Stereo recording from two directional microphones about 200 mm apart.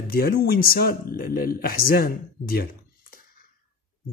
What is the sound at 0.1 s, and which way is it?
A man's voice, 50° left (ahead or behind).